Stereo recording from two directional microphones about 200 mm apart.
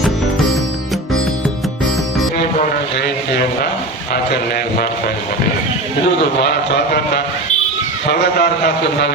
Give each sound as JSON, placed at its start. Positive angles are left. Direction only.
{"t": 3.0, "sound": "speech", "side_deg": 50}
{"t": 6.5, "sound": "a man's voice", "side_deg": 55}